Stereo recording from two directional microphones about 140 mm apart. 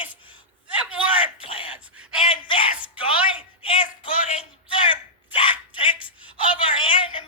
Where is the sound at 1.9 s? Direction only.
5° right (ahead or behind).